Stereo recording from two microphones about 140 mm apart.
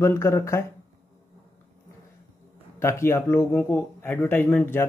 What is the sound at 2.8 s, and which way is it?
A man's voice, 20° left (ahead or behind).